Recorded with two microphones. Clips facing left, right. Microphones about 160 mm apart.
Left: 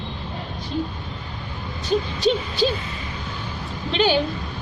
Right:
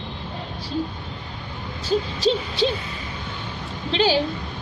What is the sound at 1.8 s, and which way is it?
Hoot, 30° right (ahead or behind).